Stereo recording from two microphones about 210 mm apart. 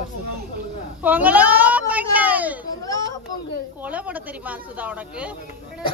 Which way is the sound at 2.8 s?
15° left (ahead or behind).